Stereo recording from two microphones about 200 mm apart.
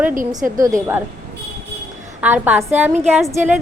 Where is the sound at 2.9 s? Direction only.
35° right (ahead or behind).